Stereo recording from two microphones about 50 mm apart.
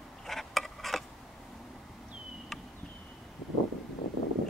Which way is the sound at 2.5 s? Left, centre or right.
Centre.